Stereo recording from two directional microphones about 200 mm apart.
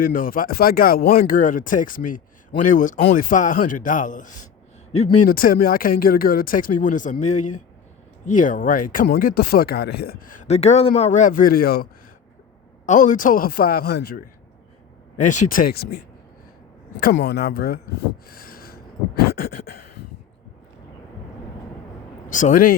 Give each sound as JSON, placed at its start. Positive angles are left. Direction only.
{"t": 0.0, "sound": "speech", "side_deg": 45}
{"t": 15.2, "sound": "speech", "side_deg": 40}
{"t": 17.2, "sound": "speech", "side_deg": 50}
{"t": 18.3, "sound": "a sound", "side_deg": 45}
{"t": 22.3, "sound": "speech", "side_deg": 40}